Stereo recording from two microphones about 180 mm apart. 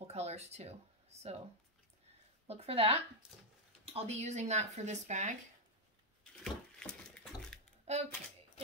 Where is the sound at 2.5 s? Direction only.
35° right (ahead or behind).